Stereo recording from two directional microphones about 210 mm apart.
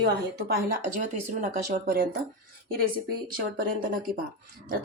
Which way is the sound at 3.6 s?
40° right (ahead or behind).